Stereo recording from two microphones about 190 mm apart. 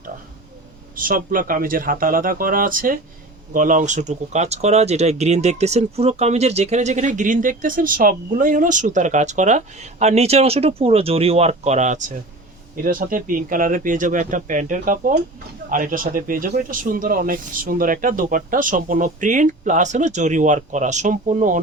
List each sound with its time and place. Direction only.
0.9 s speech: 45° right (ahead or behind)